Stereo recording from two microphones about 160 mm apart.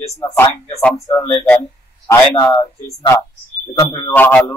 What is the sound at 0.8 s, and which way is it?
Speech, 5° left (ahead or behind).